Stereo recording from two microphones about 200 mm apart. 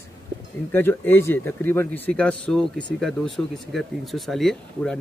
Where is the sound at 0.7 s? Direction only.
10° left (ahead or behind).